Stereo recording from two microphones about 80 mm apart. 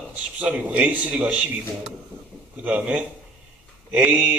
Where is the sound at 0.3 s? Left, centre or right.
Centre.